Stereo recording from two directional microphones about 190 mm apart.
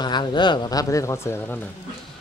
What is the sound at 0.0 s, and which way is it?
A man's voice, 25° left (ahead or behind).